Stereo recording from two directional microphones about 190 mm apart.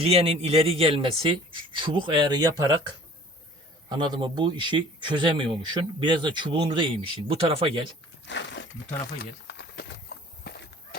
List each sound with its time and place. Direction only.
0.0 s a man's voice: 30° right (ahead or behind)
3.8 s a man's voice: 25° right (ahead or behind)
8.3 s crumpling: 70° left (ahead or behind)
9.5 s a sound: 65° left (ahead or behind)